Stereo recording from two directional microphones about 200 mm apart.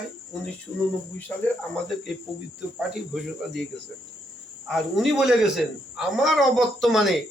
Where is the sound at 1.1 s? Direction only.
10° left (ahead or behind).